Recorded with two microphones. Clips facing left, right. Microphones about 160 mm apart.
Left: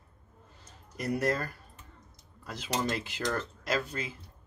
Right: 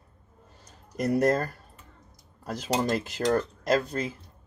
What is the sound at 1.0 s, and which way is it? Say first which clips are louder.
Speech: right 6 dB; 45° right (ahead or behind).